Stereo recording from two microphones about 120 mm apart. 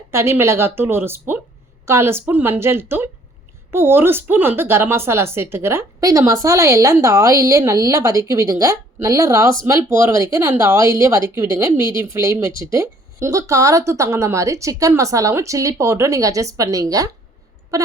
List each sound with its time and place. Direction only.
0.1 s a woman's voice: 20° right (ahead or behind)